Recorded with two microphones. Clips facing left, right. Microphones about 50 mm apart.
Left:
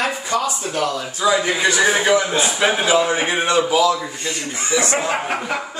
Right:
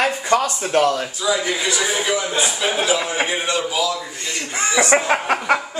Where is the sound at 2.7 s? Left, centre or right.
Left.